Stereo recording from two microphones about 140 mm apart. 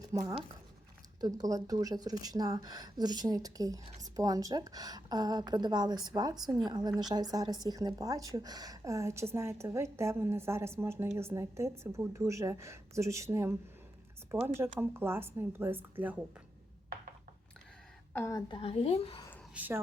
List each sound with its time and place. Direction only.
0.1 s a woman's voice: 25° right (ahead or behind)
14.6 s a woman's voice: 15° right (ahead or behind)
18.1 s a woman's voice: 15° left (ahead or behind)
18.3 s speech: 35° left (ahead or behind)
19.5 s a woman's voice: 15° right (ahead or behind)